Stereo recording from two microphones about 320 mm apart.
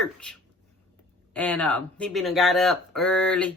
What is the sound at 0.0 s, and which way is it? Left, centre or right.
Speech, centre.